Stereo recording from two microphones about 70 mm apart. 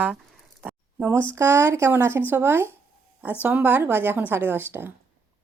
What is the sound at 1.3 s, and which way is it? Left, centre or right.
A woman's voice, right.